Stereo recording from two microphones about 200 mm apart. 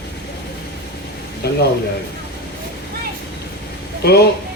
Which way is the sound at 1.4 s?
55° left (ahead or behind).